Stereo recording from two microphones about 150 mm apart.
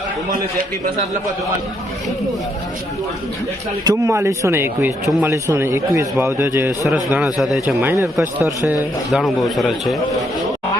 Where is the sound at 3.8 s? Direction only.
20° right (ahead or behind).